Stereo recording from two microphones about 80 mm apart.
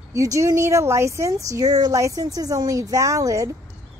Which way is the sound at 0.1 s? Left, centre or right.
Right.